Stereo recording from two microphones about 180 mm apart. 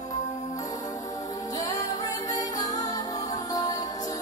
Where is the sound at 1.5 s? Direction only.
20° left (ahead or behind).